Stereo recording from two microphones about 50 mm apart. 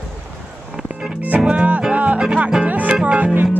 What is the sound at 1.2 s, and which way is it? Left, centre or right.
Music, right.